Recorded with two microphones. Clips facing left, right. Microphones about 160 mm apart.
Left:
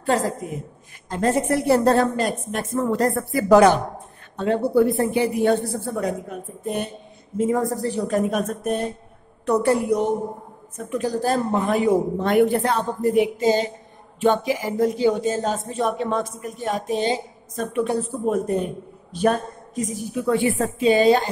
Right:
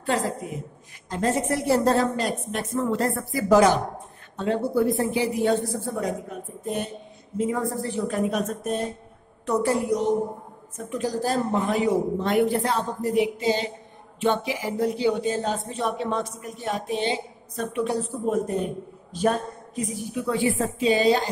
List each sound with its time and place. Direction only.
0.0 s a woman's voice: 45° left (ahead or behind)
1.1 s a woman's voice: 55° left (ahead or behind)
7.3 s a woman's voice: 45° left (ahead or behind)
19.1 s a woman's voice: 65° left (ahead or behind)
19.7 s a woman's voice: 45° left (ahead or behind)